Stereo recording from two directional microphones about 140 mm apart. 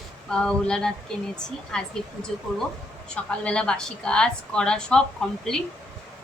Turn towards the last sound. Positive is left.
turn(degrees=5)  # may be behind; listen again after turning